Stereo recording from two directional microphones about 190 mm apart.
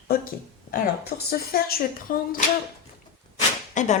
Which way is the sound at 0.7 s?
55° left (ahead or behind).